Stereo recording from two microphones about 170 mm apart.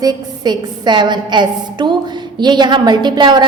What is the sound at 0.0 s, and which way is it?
A woman's voice, 25° right (ahead or behind).